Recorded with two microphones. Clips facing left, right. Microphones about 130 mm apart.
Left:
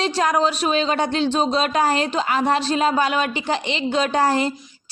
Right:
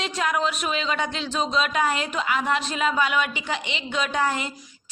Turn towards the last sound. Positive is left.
turn(degrees=35)  # may be behind; listen again after turning